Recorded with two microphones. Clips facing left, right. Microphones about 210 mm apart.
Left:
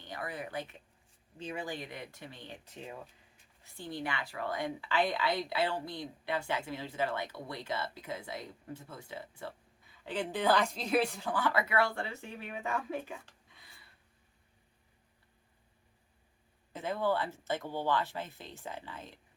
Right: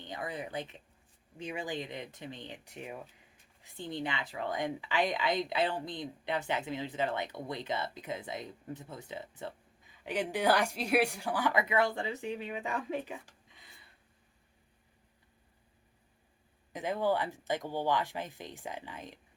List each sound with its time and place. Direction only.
0.0 s a woman's voice: 20° right (ahead or behind)
16.7 s a woman's voice: 15° right (ahead or behind)